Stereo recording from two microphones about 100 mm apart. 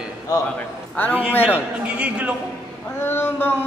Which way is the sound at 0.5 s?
15° left (ahead or behind).